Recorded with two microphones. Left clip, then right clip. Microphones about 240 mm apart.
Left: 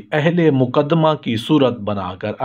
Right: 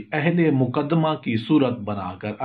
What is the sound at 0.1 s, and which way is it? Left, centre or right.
A man's voice, left.